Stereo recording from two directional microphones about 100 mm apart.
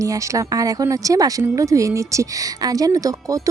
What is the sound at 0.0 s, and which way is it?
Speech, 35° right (ahead or behind).